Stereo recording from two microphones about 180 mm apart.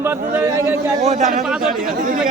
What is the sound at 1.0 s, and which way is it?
Speech, 40° right (ahead or behind).